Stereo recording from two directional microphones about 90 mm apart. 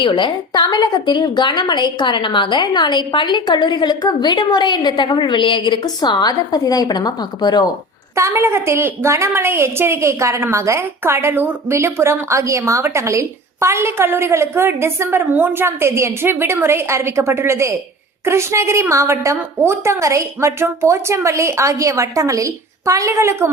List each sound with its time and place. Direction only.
0.0 s a woman's voice: 65° left (ahead or behind); by 7.7 s 50° left (ahead or behind)
8.1 s a woman's voice: 30° right (ahead or behind)